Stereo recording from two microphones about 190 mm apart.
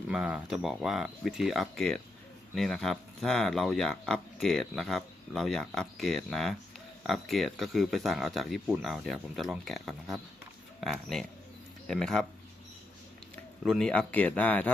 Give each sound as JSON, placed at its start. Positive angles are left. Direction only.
{"t": 0.1, "sound": "speech", "side_deg": -5}
{"t": 13.7, "sound": "speech", "side_deg": 5}